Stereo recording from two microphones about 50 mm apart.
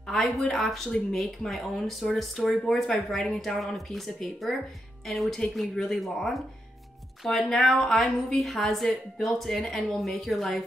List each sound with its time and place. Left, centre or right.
0.1 s a woman's voice: centre
2.5 s a woman's voice: centre
2.9 s a woman's voice: centre